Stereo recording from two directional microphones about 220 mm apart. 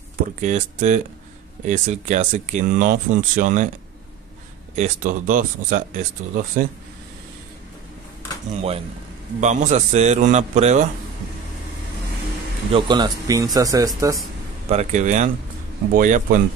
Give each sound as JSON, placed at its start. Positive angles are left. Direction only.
{"t": 0.4, "sound": "speech", "side_deg": -35}
{"t": 4.7, "sound": "speech", "side_deg": -35}
{"t": 8.5, "sound": "speech", "side_deg": -25}
{"t": 12.7, "sound": "speech", "side_deg": -20}
{"t": 14.7, "sound": "speech", "side_deg": -30}